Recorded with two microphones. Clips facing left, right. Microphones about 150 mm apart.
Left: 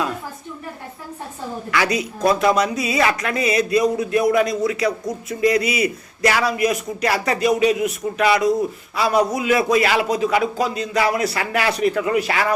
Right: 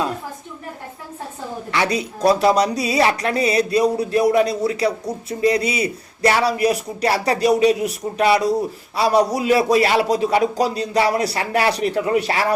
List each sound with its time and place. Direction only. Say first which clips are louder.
1.7 s speech: even; 30° right (ahead or behind)